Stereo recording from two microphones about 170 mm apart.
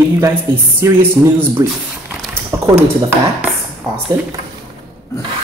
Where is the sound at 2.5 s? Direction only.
15° right (ahead or behind).